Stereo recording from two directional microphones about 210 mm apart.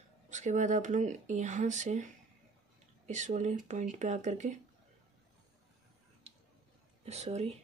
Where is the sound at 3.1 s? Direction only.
35° right (ahead or behind).